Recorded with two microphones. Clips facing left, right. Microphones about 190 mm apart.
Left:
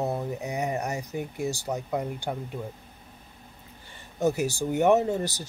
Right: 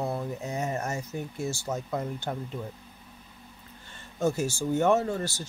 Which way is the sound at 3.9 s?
15° left (ahead or behind).